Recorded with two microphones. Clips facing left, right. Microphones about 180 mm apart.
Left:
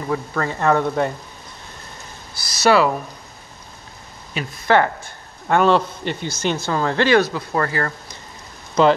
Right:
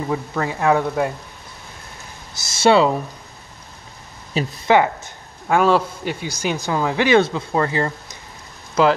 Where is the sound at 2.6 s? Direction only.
25° right (ahead or behind).